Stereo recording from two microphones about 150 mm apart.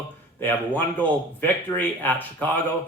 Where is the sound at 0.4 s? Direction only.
10° left (ahead or behind).